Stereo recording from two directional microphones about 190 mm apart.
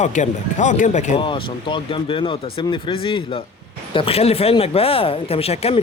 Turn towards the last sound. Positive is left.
turn(degrees=30)  # may be behind; listen again after turning